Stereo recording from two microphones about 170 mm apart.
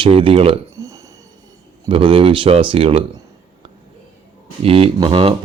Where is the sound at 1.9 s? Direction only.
30° right (ahead or behind).